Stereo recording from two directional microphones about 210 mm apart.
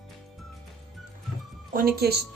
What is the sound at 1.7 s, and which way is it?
Speech, 45° right (ahead or behind).